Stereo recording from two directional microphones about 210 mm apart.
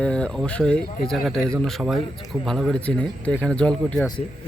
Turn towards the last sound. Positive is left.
turn(degrees=5)  # may be behind; listen again after turning